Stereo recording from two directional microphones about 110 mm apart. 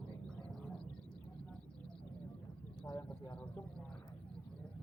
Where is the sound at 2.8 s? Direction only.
10° left (ahead or behind).